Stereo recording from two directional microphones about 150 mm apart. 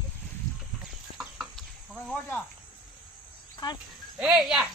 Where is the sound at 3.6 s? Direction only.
30° left (ahead or behind).